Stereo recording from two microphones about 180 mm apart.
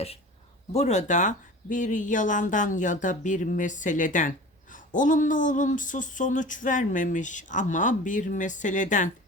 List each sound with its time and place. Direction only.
0.7 s speech: 40° left (ahead or behind)